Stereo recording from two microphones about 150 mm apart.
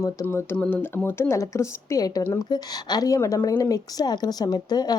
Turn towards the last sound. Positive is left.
turn(degrees=25)  # may be behind; listen again after turning